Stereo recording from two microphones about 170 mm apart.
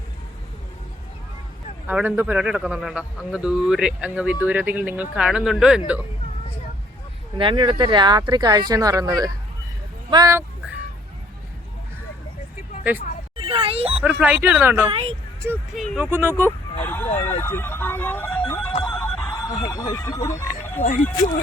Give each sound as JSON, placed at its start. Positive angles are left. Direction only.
{"t": 1.9, "sound": "a man's voice", "side_deg": -10}
{"t": 7.3, "sound": "speech", "side_deg": -30}
{"t": 12.9, "sound": "speech", "side_deg": -10}
{"t": 13.3, "sound": "a sound", "side_deg": -30}
{"t": 14.0, "sound": "speech", "side_deg": -10}
{"t": 14.8, "sound": "speech", "side_deg": -30}
{"t": 15.7, "sound": "a man's voice", "side_deg": 0}
{"t": 16.0, "sound": "speech", "side_deg": -15}
{"t": 16.7, "sound": "speech", "side_deg": 10}
{"t": 18.9, "sound": "a sound", "side_deg": 5}
{"t": 19.5, "sound": "speech", "side_deg": 20}